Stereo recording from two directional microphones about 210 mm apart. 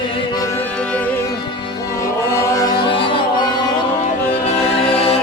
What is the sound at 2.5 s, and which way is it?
Music, 20° left (ahead or behind).